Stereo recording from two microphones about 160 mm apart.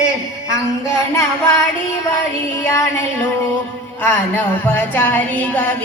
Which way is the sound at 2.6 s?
15° left (ahead or behind).